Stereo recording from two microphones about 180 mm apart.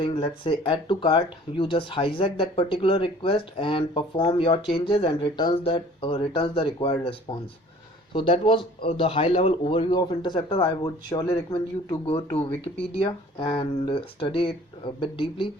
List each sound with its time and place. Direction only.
0.0 s speech: 25° left (ahead or behind)